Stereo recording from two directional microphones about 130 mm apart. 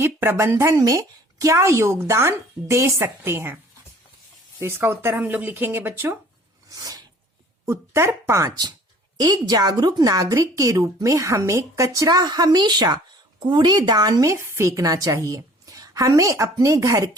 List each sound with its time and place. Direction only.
0.0 s a woman's voice: 20° right (ahead or behind)
4.6 s a woman's voice: 20° right (ahead or behind)
6.7 s a sound: 30° right (ahead or behind)
7.6 s a woman's voice: 20° right (ahead or behind)